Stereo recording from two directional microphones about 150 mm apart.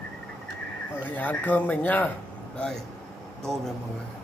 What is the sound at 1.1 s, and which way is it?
Speech, 10° left (ahead or behind).